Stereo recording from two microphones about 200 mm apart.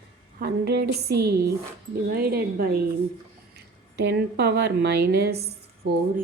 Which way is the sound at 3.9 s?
55° right (ahead or behind).